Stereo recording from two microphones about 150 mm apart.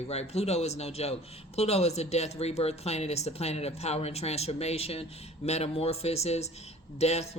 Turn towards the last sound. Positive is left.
turn(degrees=45)  # may be behind; listen again after turning